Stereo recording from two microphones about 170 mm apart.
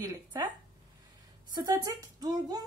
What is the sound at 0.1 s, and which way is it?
Speech, 25° right (ahead or behind).